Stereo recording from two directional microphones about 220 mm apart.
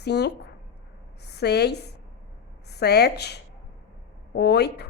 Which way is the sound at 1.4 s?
50° left (ahead or behind).